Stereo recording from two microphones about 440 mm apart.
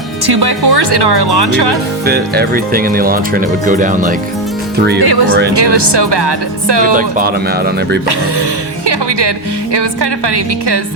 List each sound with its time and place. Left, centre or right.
0.3 s speech: right
2.0 s speech: right
4.9 s speech: right
6.9 s speech: centre
8.9 s speech: right